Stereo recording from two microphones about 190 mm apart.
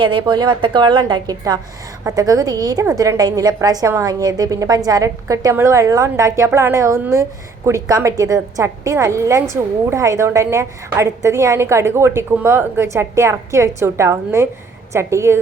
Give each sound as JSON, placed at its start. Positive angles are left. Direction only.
{"t": 0.0, "sound": "a woman's voice", "side_deg": -25}